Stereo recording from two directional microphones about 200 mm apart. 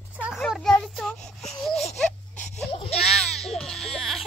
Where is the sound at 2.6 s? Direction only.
25° left (ahead or behind).